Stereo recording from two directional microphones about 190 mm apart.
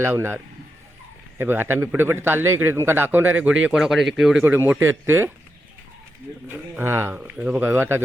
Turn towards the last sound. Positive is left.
turn(degrees=-10)  # may be behind; listen again after turning